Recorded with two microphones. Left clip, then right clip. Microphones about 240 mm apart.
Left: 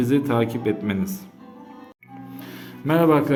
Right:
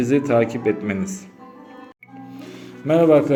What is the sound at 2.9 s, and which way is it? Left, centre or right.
Speech, centre.